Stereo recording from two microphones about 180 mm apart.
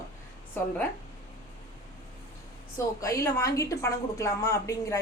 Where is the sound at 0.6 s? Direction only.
10° left (ahead or behind).